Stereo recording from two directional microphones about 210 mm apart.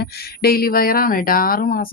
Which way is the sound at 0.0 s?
45° left (ahead or behind).